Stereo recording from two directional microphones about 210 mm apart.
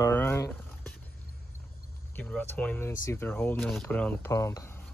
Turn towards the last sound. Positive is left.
turn(degrees=10)  # may be behind; listen again after turning